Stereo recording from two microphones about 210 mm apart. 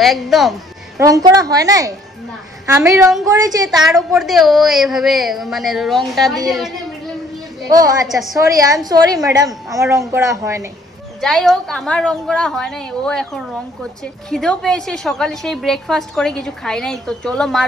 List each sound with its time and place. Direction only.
0.0 s a woman's voice: centre (ahead or behind)
0.9 s a woman's voice: 15° right (ahead or behind)
3.7 s a woman's voice: centre (ahead or behind)
7.6 s a woman's voice: 15° right (ahead or behind)
8.1 s a woman's voice: centre (ahead or behind)
8.8 s a woman's voice: 20° right (ahead or behind)
11.1 s a woman's voice: centre (ahead or behind)